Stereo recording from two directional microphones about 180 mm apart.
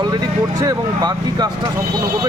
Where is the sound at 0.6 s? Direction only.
20° right (ahead or behind).